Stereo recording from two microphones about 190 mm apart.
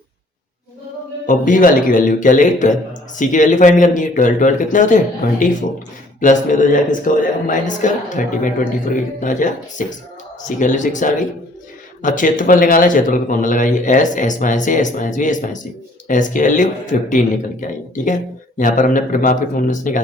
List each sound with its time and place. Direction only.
1.3 s speech: 45° left (ahead or behind)
6.1 s speech: 40° left (ahead or behind)